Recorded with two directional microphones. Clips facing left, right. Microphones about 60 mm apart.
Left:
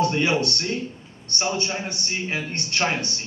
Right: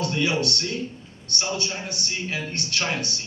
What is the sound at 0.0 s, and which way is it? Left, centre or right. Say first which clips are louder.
A man's voice: left 3 dB; left.